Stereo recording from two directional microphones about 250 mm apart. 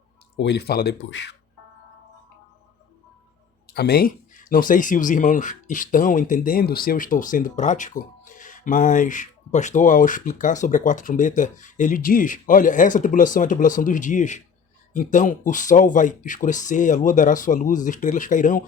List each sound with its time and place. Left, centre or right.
0.3 s speech: left
3.7 s speech: left